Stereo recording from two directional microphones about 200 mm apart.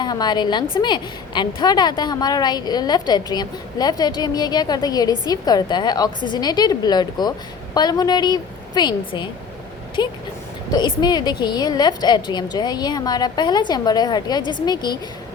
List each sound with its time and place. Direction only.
0.0 s a woman's voice: 20° left (ahead or behind)